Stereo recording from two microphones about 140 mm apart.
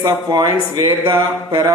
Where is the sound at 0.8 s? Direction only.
35° right (ahead or behind).